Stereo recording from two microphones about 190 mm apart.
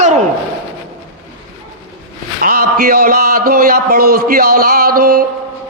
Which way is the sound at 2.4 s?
50° right (ahead or behind).